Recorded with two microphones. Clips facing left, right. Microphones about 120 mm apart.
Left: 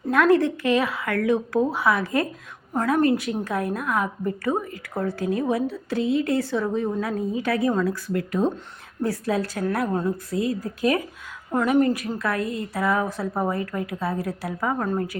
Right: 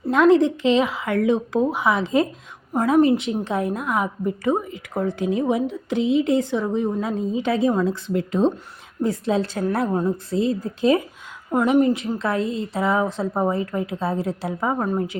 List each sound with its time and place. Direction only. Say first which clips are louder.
0.1 s a woman's voice: right 3 dB; 20° right (ahead or behind)